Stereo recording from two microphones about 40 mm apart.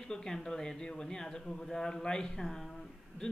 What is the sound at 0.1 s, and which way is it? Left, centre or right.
Speech, centre.